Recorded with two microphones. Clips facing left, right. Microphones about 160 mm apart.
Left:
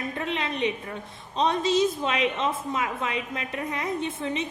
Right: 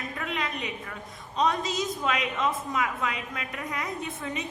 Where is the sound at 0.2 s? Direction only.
30° left (ahead or behind).